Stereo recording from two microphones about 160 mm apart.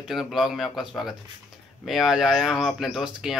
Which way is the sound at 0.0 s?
Centre (ahead or behind).